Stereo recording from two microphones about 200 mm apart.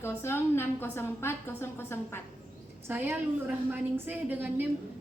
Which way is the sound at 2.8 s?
10° right (ahead or behind).